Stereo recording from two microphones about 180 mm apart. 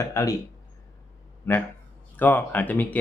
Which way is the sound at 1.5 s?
15° left (ahead or behind).